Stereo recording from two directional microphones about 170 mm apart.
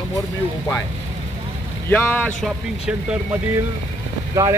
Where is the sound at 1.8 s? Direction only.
10° left (ahead or behind).